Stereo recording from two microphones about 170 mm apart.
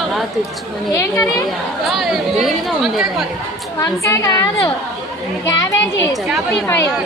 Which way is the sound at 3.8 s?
20° left (ahead or behind).